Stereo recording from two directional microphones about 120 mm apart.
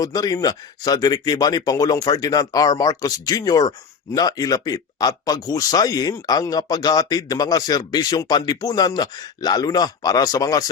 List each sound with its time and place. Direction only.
0.0 s speech: 30° left (ahead or behind)